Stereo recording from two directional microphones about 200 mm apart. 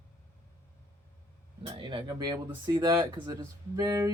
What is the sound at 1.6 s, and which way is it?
Speech, 25° right (ahead or behind).